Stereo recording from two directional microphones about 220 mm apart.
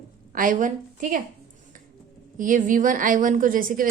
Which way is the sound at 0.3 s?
35° right (ahead or behind).